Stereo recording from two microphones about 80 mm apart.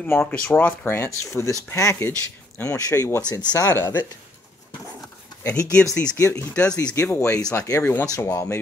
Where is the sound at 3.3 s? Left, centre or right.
Left.